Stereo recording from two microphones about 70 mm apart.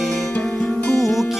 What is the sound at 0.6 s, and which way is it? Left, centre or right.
Music, left.